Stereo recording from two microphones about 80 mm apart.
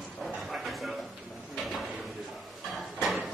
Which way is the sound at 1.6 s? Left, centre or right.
Centre.